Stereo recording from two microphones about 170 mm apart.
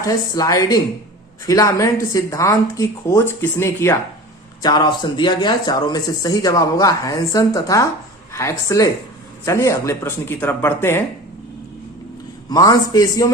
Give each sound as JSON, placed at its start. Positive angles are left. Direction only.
{"t": 0.0, "sound": "a woman's voice", "side_deg": 20}
{"t": 12.5, "sound": "speech", "side_deg": 25}